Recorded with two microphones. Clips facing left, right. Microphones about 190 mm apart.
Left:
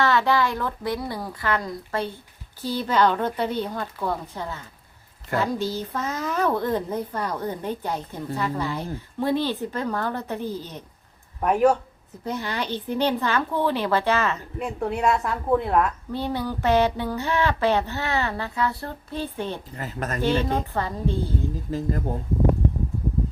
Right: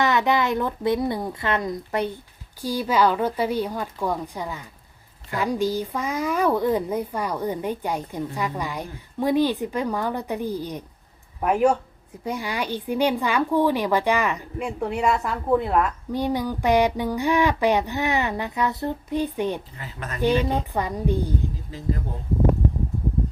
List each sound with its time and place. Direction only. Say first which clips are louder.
0.0 s a woman's voice: even; 15° right (ahead or behind)
14.8 s a woman's voice: even; 5° right (ahead or behind)
16.1 s speech: right 4 dB; 15° right (ahead or behind)
19.7 s speech: left 5 dB; 45° left (ahead or behind)
20.5 s speech: right 1 dB; 15° right (ahead or behind)
21.7 s speech: left 3 dB; 45° left (ahead or behind)